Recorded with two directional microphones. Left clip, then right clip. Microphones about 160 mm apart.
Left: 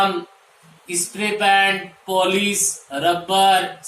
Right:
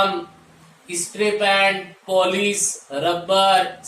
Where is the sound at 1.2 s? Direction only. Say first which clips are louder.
Left 1 dB; 20° right (ahead or behind).